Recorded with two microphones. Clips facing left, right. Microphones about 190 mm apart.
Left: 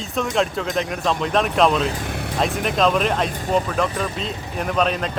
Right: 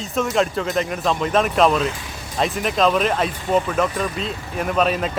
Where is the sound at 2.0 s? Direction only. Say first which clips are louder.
Left 8 dB; 60° left (ahead or behind).